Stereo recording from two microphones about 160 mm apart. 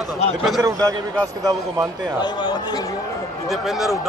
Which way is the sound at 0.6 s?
20° right (ahead or behind).